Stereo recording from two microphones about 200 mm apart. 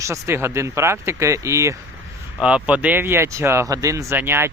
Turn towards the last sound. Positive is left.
turn(degrees=-10)  # may be behind; listen again after turning